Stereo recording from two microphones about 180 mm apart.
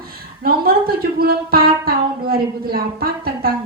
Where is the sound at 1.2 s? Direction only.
55° right (ahead or behind).